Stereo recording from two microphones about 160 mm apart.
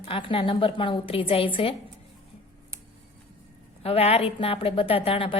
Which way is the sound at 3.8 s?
40° left (ahead or behind).